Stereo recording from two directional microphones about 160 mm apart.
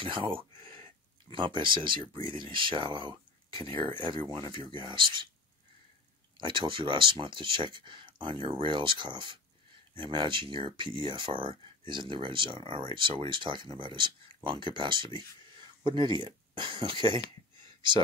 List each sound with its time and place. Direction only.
0.0 s a sound: 35° right (ahead or behind)
1.3 s speech: 30° right (ahead or behind)
6.3 s speech: 30° right (ahead or behind)